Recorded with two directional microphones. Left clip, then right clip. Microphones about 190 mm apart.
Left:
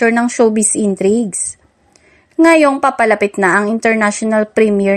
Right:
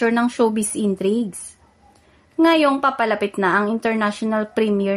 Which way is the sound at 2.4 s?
30° left (ahead or behind).